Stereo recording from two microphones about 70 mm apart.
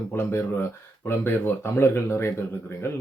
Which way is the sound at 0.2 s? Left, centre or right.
Left.